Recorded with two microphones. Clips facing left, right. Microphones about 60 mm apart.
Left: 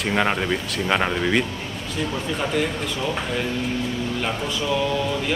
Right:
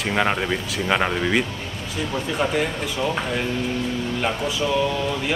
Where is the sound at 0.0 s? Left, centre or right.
Centre.